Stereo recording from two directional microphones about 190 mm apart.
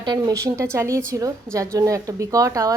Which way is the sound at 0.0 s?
20° right (ahead or behind).